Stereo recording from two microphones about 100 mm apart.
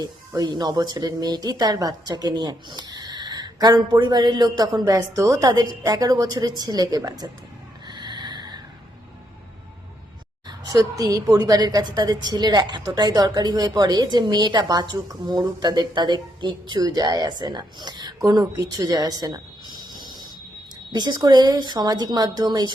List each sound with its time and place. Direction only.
0.0 s speech: 40° right (ahead or behind)
7.9 s a sound: 50° right (ahead or behind)
10.7 s a woman's voice: 40° right (ahead or behind)